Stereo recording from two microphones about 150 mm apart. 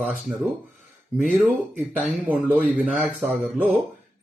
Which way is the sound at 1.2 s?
5° right (ahead or behind).